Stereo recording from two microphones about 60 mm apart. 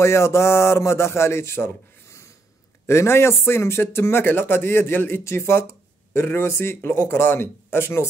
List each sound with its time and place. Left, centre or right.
0.0 s a man's voice: left